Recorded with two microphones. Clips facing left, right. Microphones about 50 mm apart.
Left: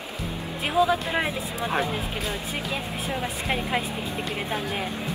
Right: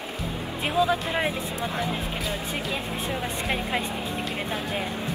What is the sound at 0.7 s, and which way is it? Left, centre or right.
Speech, centre.